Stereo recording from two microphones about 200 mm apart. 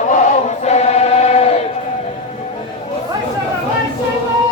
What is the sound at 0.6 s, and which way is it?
Choir, 35° left (ahead or behind).